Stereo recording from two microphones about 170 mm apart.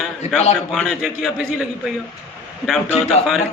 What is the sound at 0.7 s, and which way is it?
Speech, centre (ahead or behind).